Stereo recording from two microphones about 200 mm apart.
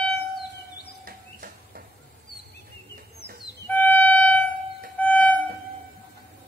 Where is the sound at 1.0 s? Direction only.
45° right (ahead or behind).